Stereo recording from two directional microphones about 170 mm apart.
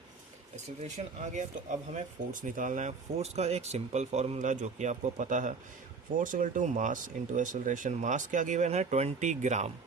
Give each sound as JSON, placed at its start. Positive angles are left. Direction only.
{"t": 0.5, "sound": "speech", "side_deg": -45}